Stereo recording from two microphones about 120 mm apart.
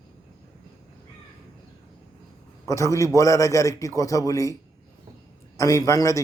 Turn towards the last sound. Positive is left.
turn(degrees=25)  # may be behind; listen again after turning